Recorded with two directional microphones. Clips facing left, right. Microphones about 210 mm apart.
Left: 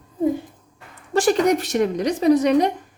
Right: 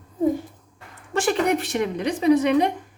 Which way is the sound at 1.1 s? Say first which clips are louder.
Left 4 dB; 40° left (ahead or behind).